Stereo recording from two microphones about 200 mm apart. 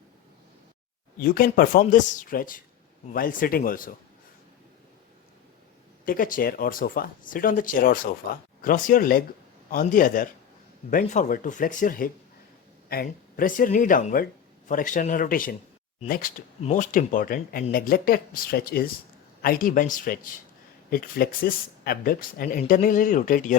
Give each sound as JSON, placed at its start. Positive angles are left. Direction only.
{"t": 1.2, "sound": "speech", "side_deg": 45}
{"t": 6.1, "sound": "speech", "side_deg": 45}